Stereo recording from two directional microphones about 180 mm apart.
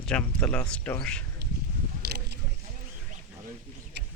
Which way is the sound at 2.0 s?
65° right (ahead or behind).